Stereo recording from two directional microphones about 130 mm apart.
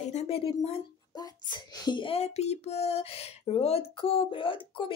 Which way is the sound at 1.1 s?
30° left (ahead or behind).